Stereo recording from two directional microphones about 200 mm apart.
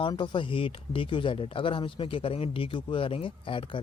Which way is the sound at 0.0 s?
25° left (ahead or behind).